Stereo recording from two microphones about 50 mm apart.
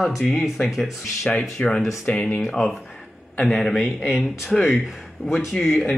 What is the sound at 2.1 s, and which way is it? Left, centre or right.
Speech, left.